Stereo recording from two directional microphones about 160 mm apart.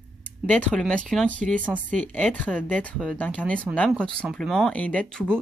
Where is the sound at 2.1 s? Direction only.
10° left (ahead or behind).